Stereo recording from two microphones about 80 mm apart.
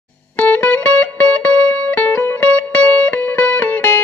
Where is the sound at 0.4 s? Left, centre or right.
Left.